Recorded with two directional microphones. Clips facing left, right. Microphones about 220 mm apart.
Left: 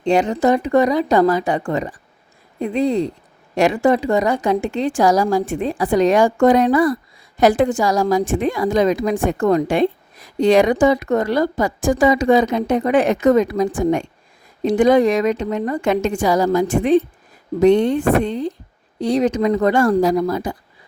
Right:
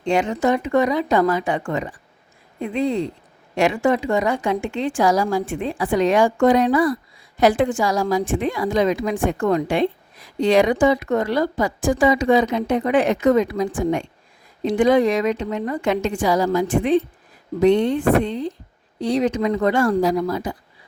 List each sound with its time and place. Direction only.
0.0 s a woman's voice: 35° left (ahead or behind)